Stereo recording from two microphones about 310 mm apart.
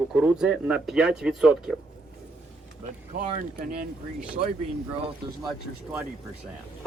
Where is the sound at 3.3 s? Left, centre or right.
Right.